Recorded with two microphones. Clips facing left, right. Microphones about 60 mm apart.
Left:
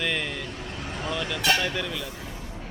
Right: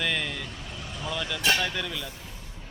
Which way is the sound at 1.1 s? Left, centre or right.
Centre.